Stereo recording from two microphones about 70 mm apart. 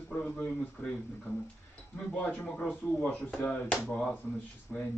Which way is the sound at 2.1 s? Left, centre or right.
Left.